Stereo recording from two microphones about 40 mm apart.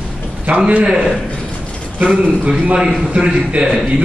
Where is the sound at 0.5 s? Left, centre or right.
Right.